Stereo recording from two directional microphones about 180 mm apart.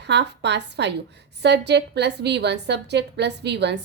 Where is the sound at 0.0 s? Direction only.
70° right (ahead or behind).